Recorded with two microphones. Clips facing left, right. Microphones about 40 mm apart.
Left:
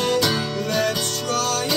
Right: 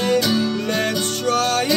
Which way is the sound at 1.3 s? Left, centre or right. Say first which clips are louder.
Right 5 dB; right.